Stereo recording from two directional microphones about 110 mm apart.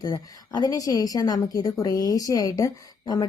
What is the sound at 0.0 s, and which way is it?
A woman's voice, 40° left (ahead or behind).